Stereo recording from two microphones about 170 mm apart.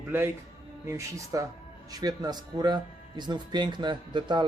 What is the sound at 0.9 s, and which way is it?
Speech, 20° right (ahead or behind).